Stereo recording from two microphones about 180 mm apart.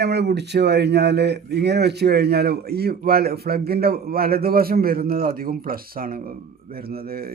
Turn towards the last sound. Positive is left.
turn(degrees=-55)  # may be behind; listen again after turning